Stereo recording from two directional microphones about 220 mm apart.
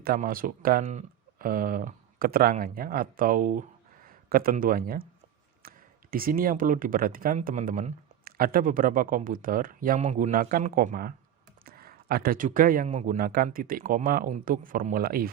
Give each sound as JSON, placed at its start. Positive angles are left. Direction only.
{"t": 0.0, "sound": "speech", "side_deg": -40}